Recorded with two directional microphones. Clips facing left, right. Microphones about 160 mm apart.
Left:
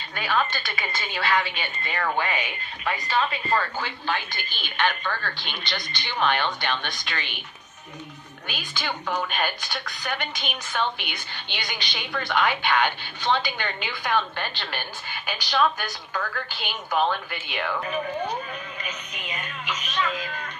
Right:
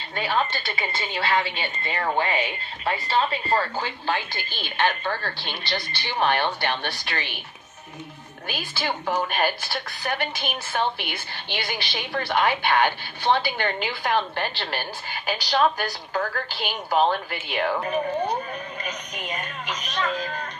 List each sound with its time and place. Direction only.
0.2 s a woman's voice: 25° right (ahead or behind)
8.5 s a woman's voice: 40° right (ahead or behind)
18.8 s television: 40° right (ahead or behind)